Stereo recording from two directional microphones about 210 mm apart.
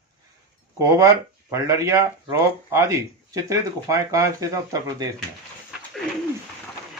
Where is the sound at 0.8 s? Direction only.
15° right (ahead or behind).